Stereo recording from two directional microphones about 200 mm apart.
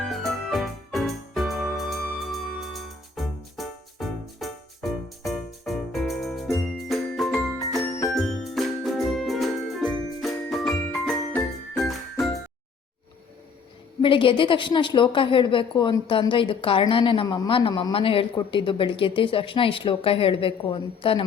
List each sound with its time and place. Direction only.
0.0 s music: centre (ahead or behind)
14.0 s a woman's voice: 25° left (ahead or behind)